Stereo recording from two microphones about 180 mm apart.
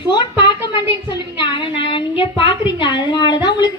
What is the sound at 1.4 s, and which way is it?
A woman's voice, 25° left (ahead or behind).